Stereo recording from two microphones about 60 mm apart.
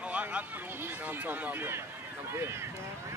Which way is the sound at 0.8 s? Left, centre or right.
Right.